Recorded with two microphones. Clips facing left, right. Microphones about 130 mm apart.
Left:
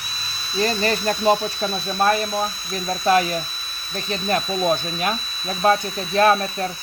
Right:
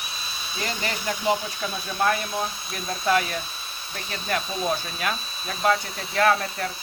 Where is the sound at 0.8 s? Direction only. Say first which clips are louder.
Left 7 dB; 40° left (ahead or behind).